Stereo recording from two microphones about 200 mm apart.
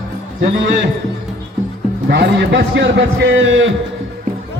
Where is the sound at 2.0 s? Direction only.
55° right (ahead or behind).